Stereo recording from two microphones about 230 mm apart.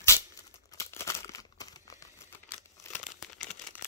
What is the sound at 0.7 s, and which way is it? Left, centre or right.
Crumpling, centre.